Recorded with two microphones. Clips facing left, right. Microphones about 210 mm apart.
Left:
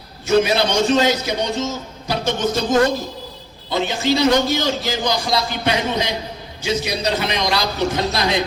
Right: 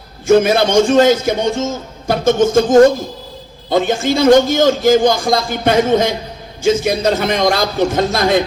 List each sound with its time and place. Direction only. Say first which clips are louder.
0.3 s speech: right 5 dB; 50° right (ahead or behind)